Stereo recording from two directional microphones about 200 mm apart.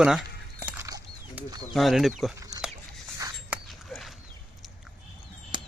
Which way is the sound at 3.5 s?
Centre (ahead or behind).